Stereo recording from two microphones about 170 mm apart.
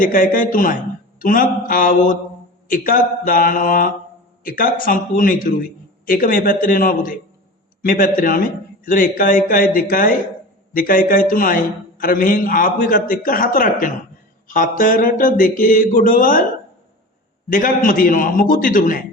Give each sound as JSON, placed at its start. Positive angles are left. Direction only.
{"t": 0.0, "sound": "a man's voice", "side_deg": 55}
{"t": 17.5, "sound": "a man's voice", "side_deg": 55}